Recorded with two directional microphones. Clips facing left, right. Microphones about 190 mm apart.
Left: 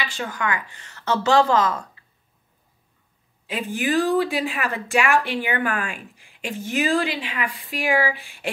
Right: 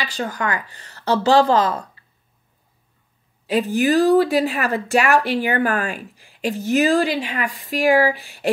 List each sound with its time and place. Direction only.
0.0 s speech: 40° right (ahead or behind)
3.4 s speech: 40° right (ahead or behind)